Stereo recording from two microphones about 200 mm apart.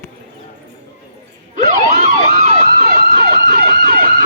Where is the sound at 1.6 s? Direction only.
40° right (ahead or behind).